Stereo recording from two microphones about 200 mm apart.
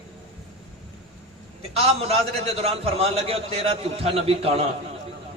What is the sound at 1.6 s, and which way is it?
A man's voice, 30° right (ahead or behind).